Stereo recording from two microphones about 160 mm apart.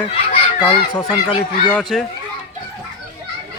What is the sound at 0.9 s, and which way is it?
Speech, 25° left (ahead or behind).